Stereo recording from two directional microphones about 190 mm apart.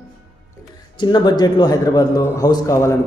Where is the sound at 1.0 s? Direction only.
25° left (ahead or behind).